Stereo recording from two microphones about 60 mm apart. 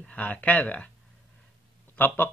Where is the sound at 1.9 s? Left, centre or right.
Left.